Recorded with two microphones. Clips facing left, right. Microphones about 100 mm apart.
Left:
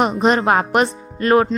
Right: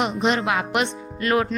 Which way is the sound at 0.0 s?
40° left (ahead or behind).